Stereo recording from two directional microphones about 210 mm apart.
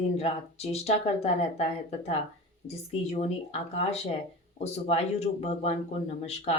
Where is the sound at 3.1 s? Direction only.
30° left (ahead or behind).